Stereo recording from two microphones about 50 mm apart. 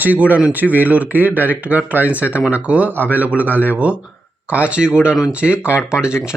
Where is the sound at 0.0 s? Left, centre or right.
Right.